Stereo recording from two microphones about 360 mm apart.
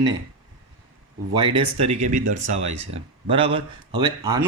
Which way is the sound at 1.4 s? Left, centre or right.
Centre.